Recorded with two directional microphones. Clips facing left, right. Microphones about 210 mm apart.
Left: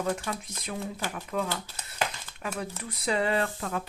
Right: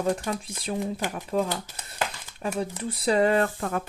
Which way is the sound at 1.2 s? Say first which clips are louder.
Right 5 dB; 35° right (ahead or behind).